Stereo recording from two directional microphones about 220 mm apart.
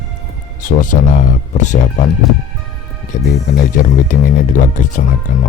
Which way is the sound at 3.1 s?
35° left (ahead or behind).